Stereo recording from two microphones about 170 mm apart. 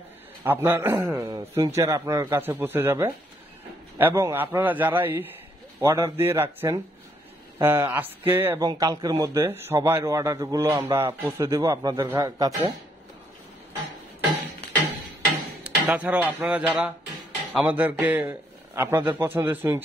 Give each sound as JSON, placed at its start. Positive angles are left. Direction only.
{"t": 0.4, "sound": "a man's voice", "side_deg": -15}
{"t": 15.6, "sound": "a man's voice", "side_deg": -10}